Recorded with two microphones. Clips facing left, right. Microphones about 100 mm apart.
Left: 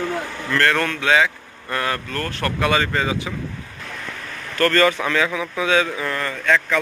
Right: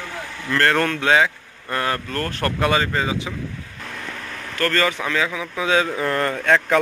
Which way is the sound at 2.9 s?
20° right (ahead or behind).